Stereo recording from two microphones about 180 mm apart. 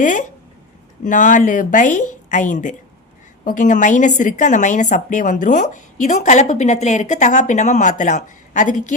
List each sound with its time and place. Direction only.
0.0 s a woman's voice: 45° left (ahead or behind)